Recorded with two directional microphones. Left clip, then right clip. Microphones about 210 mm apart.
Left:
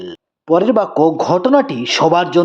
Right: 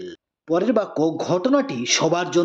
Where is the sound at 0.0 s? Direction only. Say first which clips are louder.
Left 6 dB; 5° left (ahead or behind).